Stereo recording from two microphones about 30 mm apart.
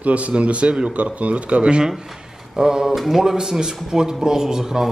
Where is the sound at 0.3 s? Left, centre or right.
Right.